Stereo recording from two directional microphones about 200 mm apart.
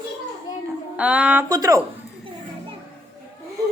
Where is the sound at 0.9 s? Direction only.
5° right (ahead or behind).